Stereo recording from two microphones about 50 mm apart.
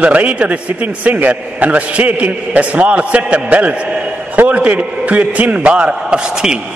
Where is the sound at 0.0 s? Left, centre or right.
Right.